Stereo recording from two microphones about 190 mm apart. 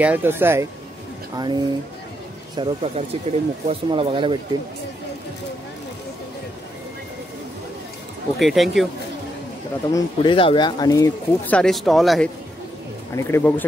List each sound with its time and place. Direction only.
0.0 s speech: 10° right (ahead or behind)
1.3 s speech: 20° right (ahead or behind)
8.4 s speech: centre (ahead or behind)
9.9 s speech: 25° left (ahead or behind)
11.5 s speech: centre (ahead or behind)
13.1 s speech: 10° left (ahead or behind)